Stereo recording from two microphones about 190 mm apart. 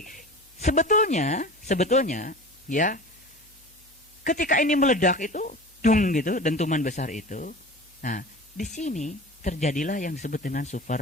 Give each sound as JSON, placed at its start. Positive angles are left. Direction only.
{"t": 0.0, "sound": "speech", "side_deg": 45}
{"t": 4.2, "sound": "speech", "side_deg": 45}